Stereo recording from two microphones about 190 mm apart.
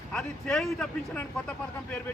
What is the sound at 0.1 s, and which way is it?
A man's voice, 5° left (ahead or behind).